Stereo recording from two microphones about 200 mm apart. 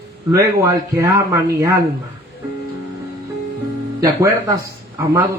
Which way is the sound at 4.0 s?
15° right (ahead or behind).